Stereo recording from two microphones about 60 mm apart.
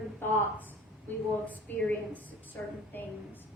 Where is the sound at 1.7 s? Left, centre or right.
Left.